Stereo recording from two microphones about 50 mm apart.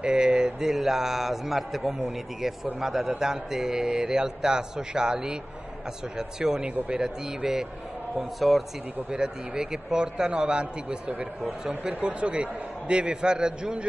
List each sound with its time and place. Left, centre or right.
0.0 s a man's voice: centre
8.2 s speech: centre
9.1 s a man's voice: centre